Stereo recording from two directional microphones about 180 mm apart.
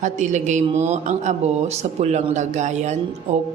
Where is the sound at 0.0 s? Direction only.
40° right (ahead or behind).